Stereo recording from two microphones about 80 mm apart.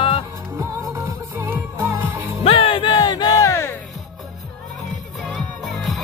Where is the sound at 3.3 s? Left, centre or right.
Left.